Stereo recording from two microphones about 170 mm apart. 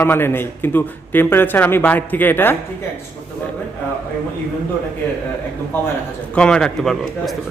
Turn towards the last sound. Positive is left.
turn(degrees=0)  # may be behind; listen again after turning